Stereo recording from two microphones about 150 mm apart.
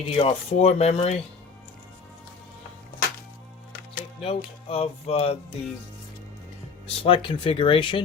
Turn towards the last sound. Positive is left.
turn(degrees=35)  # may be behind; listen again after turning